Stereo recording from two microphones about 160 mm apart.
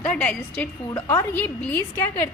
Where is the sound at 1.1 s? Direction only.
20° left (ahead or behind).